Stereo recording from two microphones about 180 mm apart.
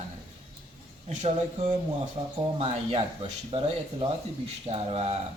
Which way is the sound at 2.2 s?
40° right (ahead or behind).